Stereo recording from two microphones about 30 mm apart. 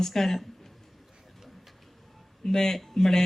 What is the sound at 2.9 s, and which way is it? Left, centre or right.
Speech, centre.